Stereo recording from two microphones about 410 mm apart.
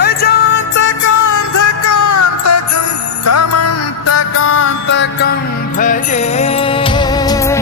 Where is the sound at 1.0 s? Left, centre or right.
Left.